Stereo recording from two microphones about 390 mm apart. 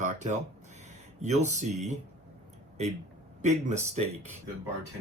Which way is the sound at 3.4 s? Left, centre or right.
Centre.